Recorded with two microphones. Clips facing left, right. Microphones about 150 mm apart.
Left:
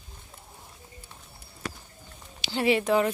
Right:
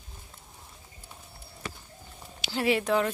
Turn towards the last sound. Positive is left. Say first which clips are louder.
# left 2 dB
turn(degrees=5)  # may be behind; listen again after turning